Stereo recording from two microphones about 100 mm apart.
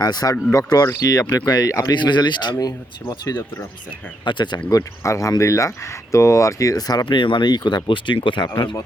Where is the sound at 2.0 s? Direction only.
50° left (ahead or behind).